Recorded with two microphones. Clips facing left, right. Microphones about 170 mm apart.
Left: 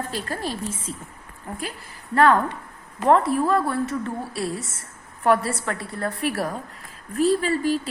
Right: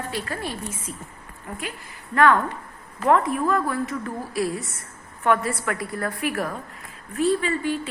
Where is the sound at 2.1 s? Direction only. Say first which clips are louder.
Left 1 dB; 35° left (ahead or behind).